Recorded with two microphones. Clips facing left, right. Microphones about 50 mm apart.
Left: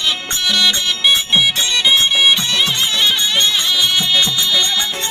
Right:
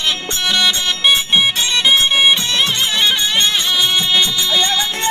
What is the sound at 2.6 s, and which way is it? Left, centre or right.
Music, centre.